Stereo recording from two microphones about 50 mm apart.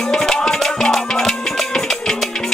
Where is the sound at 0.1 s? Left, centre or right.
Centre.